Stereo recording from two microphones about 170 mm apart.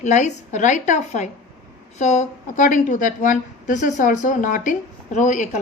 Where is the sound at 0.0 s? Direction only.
45° left (ahead or behind).